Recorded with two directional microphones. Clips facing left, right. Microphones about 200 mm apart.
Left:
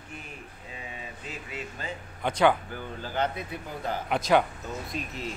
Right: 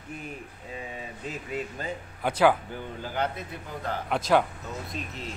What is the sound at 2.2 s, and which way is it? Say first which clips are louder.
Speech: right 1 dB; 5° right (ahead or behind).